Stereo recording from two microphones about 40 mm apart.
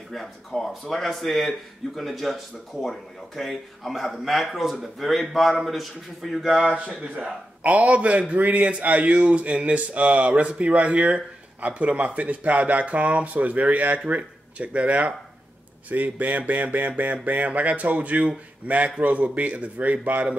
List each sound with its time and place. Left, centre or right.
0.1 s a man's voice: centre
7.6 s speech: right